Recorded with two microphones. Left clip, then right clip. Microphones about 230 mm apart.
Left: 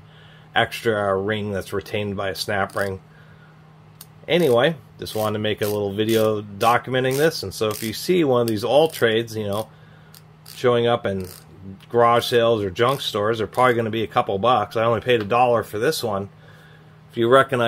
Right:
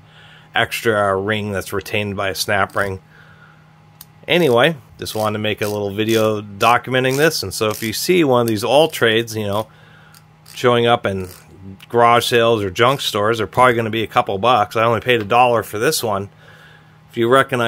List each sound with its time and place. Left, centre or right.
0.5 s speech: right
4.3 s speech: right
17.1 s speech: right